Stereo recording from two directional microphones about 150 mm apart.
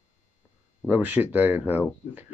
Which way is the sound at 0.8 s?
10° right (ahead or behind).